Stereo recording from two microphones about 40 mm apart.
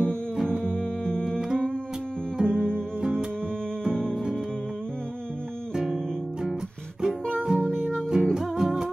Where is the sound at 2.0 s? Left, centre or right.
Left.